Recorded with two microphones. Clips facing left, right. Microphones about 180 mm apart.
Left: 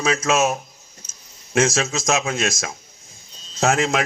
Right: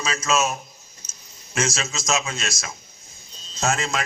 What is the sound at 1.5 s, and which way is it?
A man's voice, 55° left (ahead or behind).